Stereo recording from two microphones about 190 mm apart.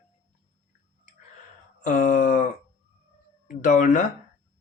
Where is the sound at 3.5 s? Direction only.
40° left (ahead or behind).